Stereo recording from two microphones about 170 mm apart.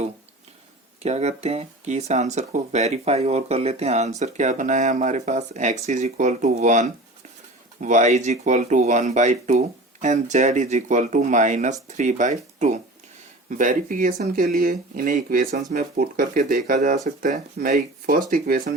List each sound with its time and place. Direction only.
1.0 s speech: 40° right (ahead or behind); by 18.7 s 55° right (ahead or behind)